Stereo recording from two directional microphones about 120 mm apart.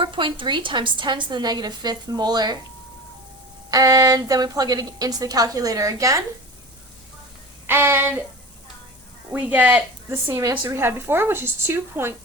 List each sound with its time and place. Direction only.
0.0 s a woman's voice: 45° right (ahead or behind)
3.7 s a woman's voice: 30° right (ahead or behind)
7.7 s a woman's voice: 20° right (ahead or behind)
9.3 s a woman's voice: 10° right (ahead or behind)